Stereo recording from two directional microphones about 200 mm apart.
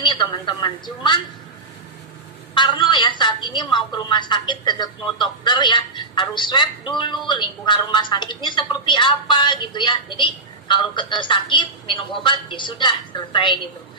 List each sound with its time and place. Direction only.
0.0 s a woman's voice: 20° left (ahead or behind)
2.5 s a woman's voice: 20° left (ahead or behind)